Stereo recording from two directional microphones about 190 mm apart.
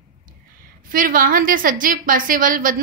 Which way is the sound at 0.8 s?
45° right (ahead or behind).